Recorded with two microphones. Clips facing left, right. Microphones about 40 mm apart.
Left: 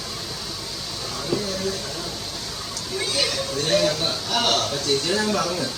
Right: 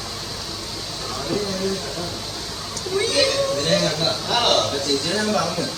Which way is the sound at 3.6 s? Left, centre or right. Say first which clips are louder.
Right 1 dB; centre.